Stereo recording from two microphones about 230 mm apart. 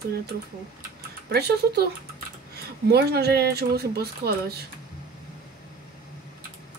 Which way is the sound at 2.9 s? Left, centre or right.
Right.